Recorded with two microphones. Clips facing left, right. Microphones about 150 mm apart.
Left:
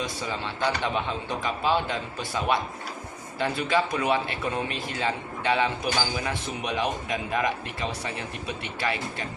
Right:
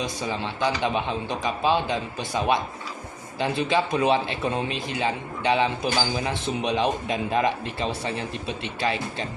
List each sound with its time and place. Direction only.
0.0 s a man's voice: 20° right (ahead or behind)